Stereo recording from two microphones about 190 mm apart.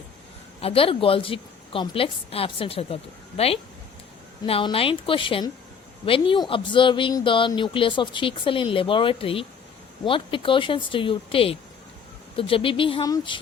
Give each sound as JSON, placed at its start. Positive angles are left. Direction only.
{"t": 0.6, "sound": "a woman's voice", "side_deg": 30}